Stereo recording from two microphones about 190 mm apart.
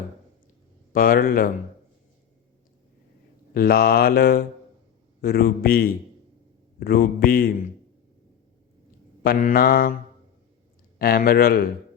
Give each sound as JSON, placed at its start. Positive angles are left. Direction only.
{"t": 0.9, "sound": "mantra", "side_deg": 50}
{"t": 3.5, "sound": "mantra", "side_deg": 55}
{"t": 9.2, "sound": "mantra", "side_deg": 50}
{"t": 10.9, "sound": "mantra", "side_deg": 50}